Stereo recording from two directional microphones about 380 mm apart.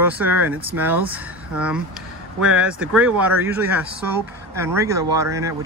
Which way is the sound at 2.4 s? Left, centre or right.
Centre.